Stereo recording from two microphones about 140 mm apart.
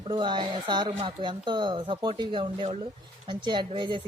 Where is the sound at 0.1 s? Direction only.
35° right (ahead or behind).